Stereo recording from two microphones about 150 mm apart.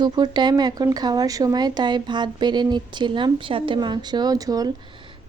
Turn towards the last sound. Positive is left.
turn(degrees=-25)  # may be behind; listen again after turning